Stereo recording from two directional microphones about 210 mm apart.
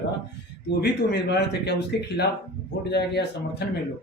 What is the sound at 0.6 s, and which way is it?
A man's voice, 50° left (ahead or behind).